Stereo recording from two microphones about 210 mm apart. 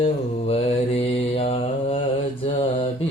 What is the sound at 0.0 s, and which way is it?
Mantra, 25° left (ahead or behind).